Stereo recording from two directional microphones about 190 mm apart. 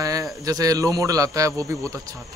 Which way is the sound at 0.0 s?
15° right (ahead or behind).